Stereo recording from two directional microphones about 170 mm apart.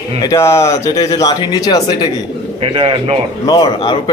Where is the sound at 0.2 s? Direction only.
20° left (ahead or behind).